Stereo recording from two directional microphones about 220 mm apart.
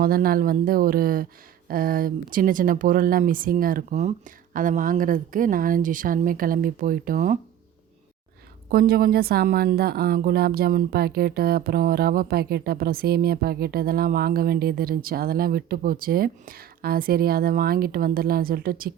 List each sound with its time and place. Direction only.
0.0 s speech: 40° right (ahead or behind)
8.7 s a woman's voice: 40° right (ahead or behind)